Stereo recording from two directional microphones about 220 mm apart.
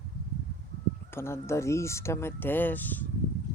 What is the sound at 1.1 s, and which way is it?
Speech, 10° left (ahead or behind).